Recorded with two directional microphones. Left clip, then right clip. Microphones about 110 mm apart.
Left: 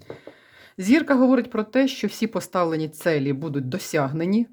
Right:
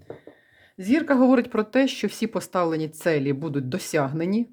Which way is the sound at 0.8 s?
25° left (ahead or behind).